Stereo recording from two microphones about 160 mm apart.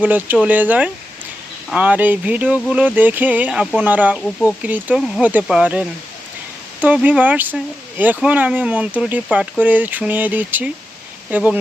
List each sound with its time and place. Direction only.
0.0 s speech: 10° right (ahead or behind)